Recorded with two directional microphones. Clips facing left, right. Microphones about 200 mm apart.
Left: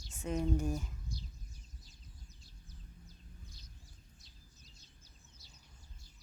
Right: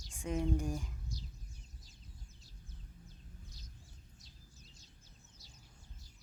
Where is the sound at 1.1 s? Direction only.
40° right (ahead or behind).